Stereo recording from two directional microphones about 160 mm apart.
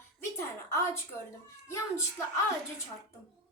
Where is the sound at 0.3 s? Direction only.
15° left (ahead or behind).